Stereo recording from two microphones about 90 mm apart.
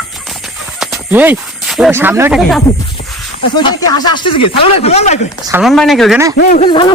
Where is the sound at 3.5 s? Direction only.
50° left (ahead or behind); by 4.8 s 80° left.